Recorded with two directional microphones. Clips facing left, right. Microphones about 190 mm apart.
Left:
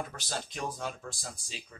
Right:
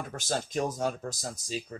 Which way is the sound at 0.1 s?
45° right (ahead or behind).